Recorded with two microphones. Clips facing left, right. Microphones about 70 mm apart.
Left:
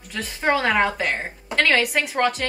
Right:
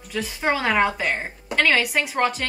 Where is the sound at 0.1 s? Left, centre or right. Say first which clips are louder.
Left 2 dB; centre.